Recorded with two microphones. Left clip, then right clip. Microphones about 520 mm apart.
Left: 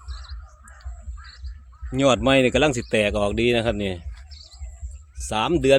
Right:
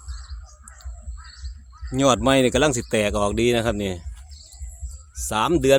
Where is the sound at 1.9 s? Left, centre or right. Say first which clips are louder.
Even; right.